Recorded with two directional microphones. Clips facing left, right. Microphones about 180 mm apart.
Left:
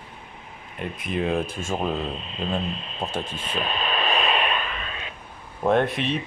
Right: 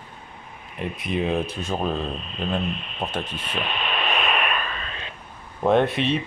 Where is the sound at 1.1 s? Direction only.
Centre (ahead or behind).